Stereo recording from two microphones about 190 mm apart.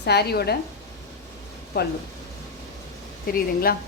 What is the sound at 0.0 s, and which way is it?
Speech, 60° left (ahead or behind).